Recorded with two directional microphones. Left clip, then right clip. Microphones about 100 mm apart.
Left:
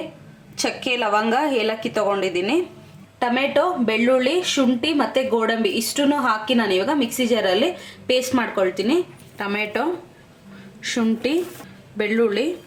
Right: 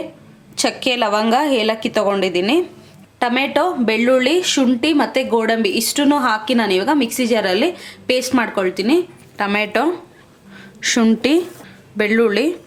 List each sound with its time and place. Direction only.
0.6 s a woman's voice: 55° right (ahead or behind)